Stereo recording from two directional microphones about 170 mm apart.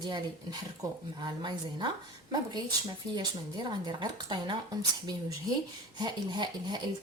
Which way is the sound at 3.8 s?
25° right (ahead or behind).